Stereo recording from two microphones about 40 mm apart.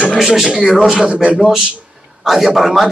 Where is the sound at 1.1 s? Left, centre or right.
Right.